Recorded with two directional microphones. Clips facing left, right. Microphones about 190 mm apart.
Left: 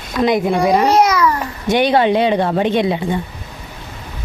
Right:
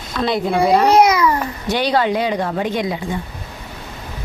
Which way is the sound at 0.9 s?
15° right (ahead or behind).